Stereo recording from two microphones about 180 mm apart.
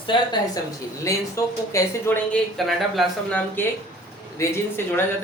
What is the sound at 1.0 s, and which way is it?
Speech, 15° left (ahead or behind).